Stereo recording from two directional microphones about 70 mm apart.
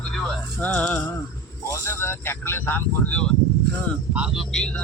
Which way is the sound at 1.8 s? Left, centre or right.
Left.